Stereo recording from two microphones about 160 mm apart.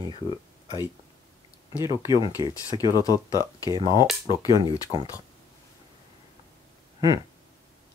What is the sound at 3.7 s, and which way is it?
Speech, 25° right (ahead or behind).